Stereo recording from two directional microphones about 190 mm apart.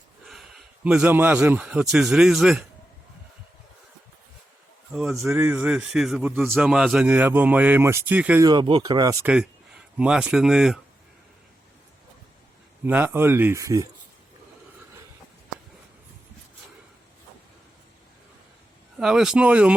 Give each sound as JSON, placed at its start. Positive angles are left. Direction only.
{"t": 0.3, "sound": "speech", "side_deg": 0}
{"t": 5.1, "sound": "a man's voice", "side_deg": -10}
{"t": 8.4, "sound": "speech", "side_deg": -25}
{"t": 9.2, "sound": "speech", "side_deg": -5}
{"t": 12.8, "sound": "a man's voice", "side_deg": -10}
{"t": 18.9, "sound": "speech", "side_deg": -5}